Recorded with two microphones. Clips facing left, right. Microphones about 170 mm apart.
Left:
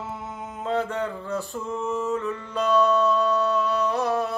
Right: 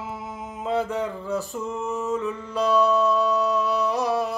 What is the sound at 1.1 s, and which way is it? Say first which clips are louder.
Music: right 2 dB; 5° right (ahead or behind).